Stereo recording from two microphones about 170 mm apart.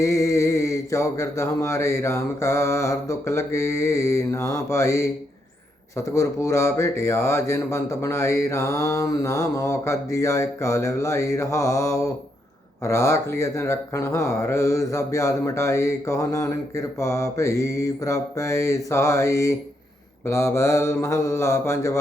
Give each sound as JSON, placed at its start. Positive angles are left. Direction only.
{"t": 0.0, "sound": "speech", "side_deg": 20}